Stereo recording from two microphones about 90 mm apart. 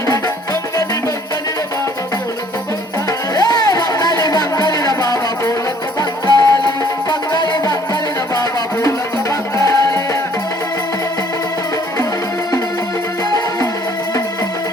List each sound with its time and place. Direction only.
3.3 s music: 50° left (ahead or behind)
9.6 s music: 40° left (ahead or behind)